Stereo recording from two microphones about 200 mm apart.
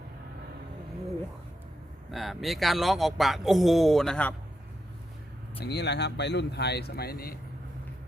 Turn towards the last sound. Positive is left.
turn(degrees=50)  # may be behind; listen again after turning